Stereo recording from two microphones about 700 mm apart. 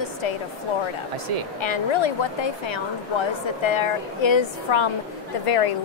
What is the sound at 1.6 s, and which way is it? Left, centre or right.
A woman's voice, left.